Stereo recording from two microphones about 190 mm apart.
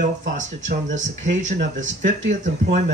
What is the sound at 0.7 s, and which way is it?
A man's voice, 40° right (ahead or behind).